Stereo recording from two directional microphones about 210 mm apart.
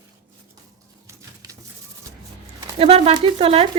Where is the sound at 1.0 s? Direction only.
15° right (ahead or behind).